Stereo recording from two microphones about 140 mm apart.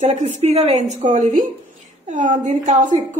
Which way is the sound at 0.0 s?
50° right (ahead or behind).